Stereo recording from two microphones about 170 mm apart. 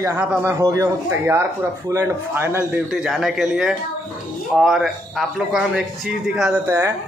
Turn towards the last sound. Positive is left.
turn(degrees=-15)  # may be behind; listen again after turning